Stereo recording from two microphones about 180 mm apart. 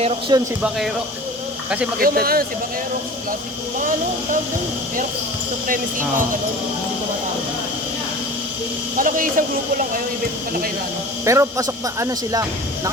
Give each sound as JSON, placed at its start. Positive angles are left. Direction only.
{"t": 0.0, "sound": "speech", "side_deg": -25}
{"t": 2.0, "sound": "speech", "side_deg": -55}
{"t": 5.6, "sound": "speech", "side_deg": -50}
{"t": 9.0, "sound": "speech", "side_deg": -50}
{"t": 11.3, "sound": "speech", "side_deg": -15}